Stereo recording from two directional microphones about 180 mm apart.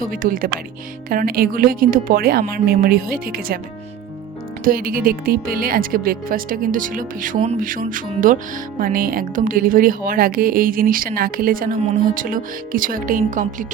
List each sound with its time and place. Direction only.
0.1 s speech: 50° right (ahead or behind)
4.6 s speech: 55° right (ahead or behind)